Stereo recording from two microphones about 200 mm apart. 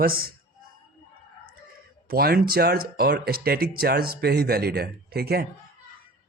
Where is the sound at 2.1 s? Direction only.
50° right (ahead or behind).